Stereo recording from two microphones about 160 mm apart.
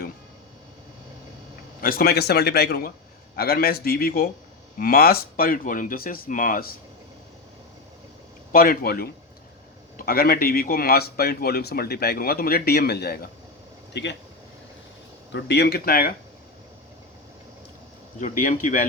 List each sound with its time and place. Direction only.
1.8 s a man's voice: 65° left (ahead or behind)
8.5 s a man's voice: 65° left (ahead or behind); by 14.2 s 90° left
15.3 s speech: 90° left; by 16.1 s 70° left (ahead or behind)
18.2 s speech: 55° left (ahead or behind)